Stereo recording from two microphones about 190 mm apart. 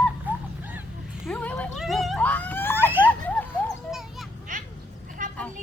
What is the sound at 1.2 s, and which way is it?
Speech, 5° left (ahead or behind).